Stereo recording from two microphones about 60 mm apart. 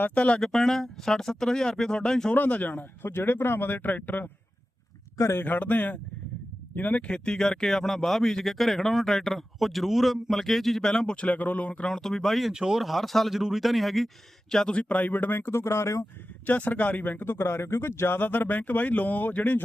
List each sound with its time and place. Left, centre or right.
0.0 s speech: left
0.4 s speech: centre
2.3 s speech: left
3.0 s speech: left
5.1 s a man's voice: left
5.4 s speech: left; by 14.1 s centre
14.5 s speech: centre; by 16.0 s left
16.5 s speech: left
17.2 s speech: left
18.2 s speech: left